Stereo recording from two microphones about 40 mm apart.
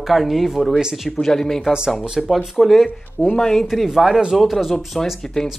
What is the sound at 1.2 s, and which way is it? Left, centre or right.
Speech, centre.